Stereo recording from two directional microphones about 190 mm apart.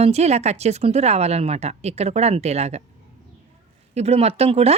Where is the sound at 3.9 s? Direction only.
35° right (ahead or behind).